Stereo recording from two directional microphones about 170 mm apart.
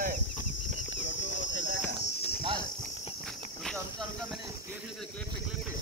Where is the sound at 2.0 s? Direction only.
30° right (ahead or behind).